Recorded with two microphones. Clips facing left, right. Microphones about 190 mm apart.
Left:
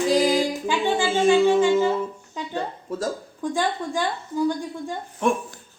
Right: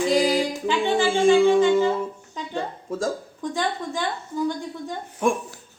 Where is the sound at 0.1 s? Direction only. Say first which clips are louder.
Left 3 dB; 10° left (ahead or behind).